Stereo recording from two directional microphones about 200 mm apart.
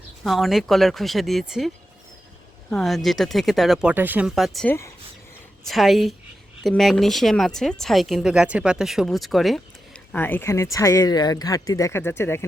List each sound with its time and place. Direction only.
0.3 s speech: centre (ahead or behind)